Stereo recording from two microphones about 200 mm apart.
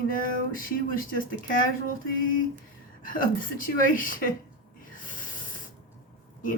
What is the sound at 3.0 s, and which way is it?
Speech, 45° left (ahead or behind).